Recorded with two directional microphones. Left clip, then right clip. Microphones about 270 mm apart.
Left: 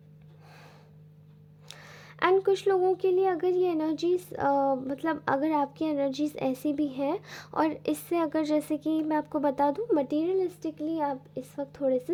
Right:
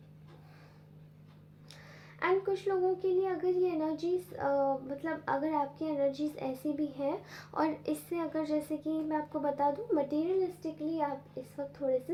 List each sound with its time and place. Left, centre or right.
1.8 s a woman's voice: left